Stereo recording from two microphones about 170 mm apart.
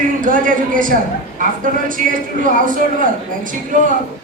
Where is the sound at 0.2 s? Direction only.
50° right (ahead or behind).